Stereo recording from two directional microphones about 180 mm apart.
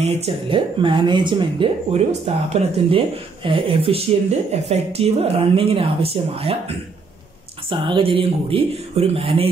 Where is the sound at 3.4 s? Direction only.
30° right (ahead or behind).